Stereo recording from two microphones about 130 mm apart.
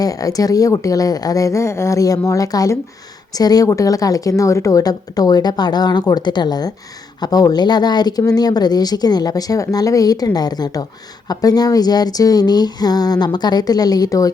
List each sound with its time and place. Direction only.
0.0 s a woman's voice: 25° left (ahead or behind)